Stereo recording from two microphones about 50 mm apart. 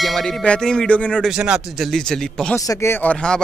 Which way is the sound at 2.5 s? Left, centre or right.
Left.